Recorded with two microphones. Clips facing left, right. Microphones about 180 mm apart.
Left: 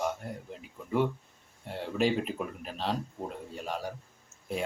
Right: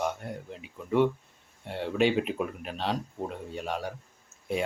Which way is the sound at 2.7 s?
Centre (ahead or behind).